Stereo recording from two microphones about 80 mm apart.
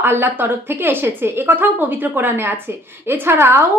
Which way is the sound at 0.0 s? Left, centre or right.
Right.